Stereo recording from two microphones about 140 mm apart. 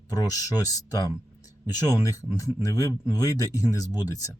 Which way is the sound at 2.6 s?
25° left (ahead or behind).